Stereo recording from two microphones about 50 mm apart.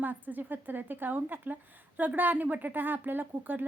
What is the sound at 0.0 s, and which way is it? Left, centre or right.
A woman's voice, right.